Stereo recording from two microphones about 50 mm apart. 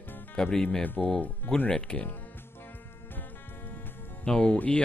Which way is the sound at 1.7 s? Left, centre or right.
Left.